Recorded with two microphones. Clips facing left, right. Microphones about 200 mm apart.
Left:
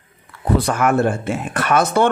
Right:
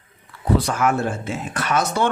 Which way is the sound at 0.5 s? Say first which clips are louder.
Left 3 dB; 55° left (ahead or behind).